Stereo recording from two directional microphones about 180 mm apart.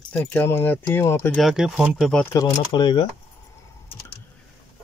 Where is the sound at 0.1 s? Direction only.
10° left (ahead or behind).